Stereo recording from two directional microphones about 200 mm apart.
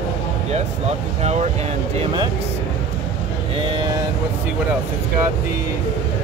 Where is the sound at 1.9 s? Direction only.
25° right (ahead or behind).